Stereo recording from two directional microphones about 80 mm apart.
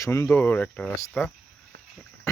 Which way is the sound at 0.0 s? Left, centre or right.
Left.